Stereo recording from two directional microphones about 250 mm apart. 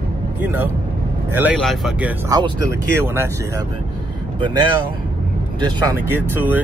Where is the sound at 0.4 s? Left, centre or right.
Centre.